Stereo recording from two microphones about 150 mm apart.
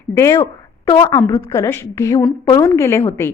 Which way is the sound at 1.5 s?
20° left (ahead or behind).